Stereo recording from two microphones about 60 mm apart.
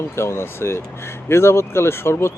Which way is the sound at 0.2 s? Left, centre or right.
Left.